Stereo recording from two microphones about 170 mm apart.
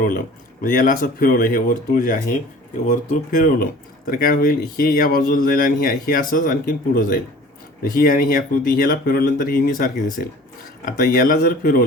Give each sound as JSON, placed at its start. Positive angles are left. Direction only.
{"t": 0.6, "sound": "speech", "side_deg": 50}